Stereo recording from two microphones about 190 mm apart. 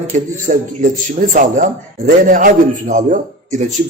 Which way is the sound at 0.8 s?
45° right (ahead or behind).